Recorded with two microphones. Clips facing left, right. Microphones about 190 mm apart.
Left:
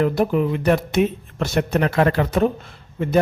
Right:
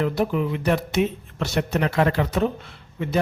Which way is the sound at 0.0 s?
50° left (ahead or behind).